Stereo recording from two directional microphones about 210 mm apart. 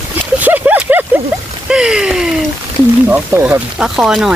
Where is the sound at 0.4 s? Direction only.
5° right (ahead or behind).